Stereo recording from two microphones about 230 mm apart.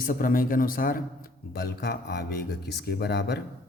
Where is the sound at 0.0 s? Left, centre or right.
Left.